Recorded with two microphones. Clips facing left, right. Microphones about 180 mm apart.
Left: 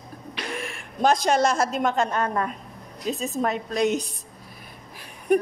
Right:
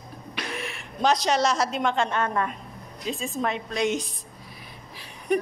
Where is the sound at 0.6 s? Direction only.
50° left (ahead or behind).